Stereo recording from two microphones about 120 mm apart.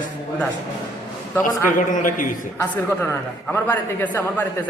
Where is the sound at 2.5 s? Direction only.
20° left (ahead or behind).